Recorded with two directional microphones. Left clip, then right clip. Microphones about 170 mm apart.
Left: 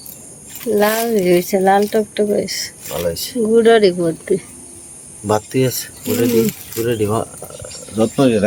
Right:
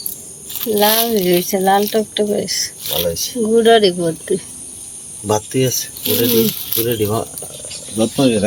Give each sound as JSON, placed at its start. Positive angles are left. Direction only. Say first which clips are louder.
{"t": 0.6, "sound": "speech", "louder": "right 1 dB", "side_deg": 15}
{"t": 2.9, "sound": "speech", "louder": "right 1 dB", "side_deg": 5}
{"t": 3.4, "sound": "speech", "louder": "even", "side_deg": 20}
{"t": 5.2, "sound": "speech", "louder": "even", "side_deg": 0}